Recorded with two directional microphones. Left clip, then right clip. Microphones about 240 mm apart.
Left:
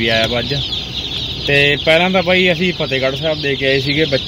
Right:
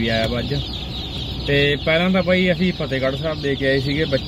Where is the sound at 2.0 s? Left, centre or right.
Left.